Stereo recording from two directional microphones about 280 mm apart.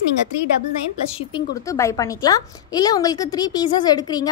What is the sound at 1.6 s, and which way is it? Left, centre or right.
A woman's voice, centre.